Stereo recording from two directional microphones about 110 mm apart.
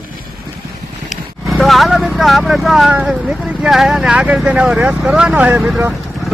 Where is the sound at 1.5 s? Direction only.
Centre (ahead or behind).